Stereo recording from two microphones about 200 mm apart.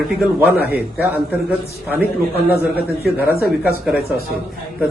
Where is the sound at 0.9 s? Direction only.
10° right (ahead or behind).